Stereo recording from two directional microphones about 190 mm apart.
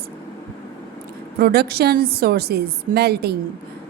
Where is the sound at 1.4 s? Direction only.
55° right (ahead or behind).